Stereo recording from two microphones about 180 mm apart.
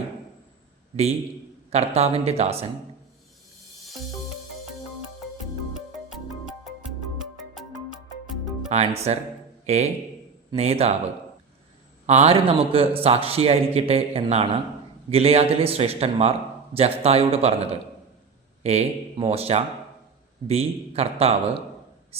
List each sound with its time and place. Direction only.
1.7 s a man's voice: 35° right (ahead or behind)
8.7 s a man's voice: 35° right (ahead or behind)
12.0 s a man's voice: 35° right (ahead or behind)